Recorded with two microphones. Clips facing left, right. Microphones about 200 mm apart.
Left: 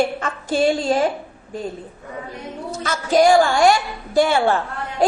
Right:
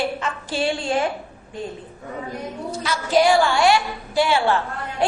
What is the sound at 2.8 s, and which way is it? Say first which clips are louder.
A woman's voice: left 3 dB; 45° left (ahead or behind).